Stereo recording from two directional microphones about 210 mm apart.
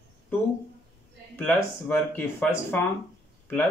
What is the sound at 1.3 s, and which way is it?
Speech, 10° left (ahead or behind).